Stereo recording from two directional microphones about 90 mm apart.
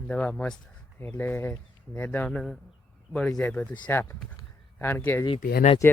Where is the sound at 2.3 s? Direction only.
Centre (ahead or behind).